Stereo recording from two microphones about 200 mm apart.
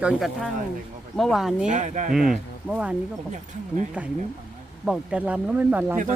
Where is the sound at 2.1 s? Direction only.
Centre (ahead or behind).